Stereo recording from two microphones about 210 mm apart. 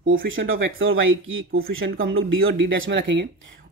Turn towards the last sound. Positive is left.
turn(degrees=-65)  # may be behind; listen again after turning